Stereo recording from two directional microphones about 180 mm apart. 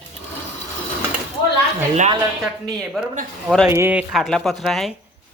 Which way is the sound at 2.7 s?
Centre (ahead or behind).